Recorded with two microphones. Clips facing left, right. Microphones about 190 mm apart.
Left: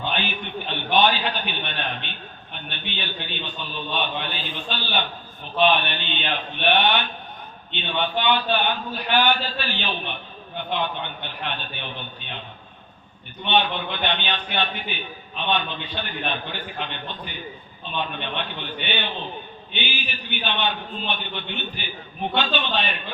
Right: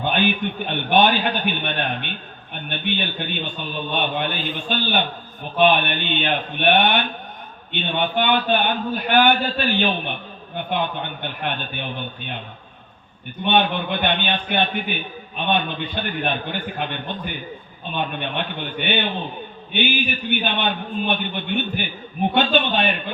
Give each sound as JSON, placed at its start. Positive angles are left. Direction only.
{"t": 0.0, "sound": "a man's voice", "side_deg": -55}
{"t": 11.2, "sound": "a man's voice", "side_deg": -50}
{"t": 13.4, "sound": "a man's voice", "side_deg": -50}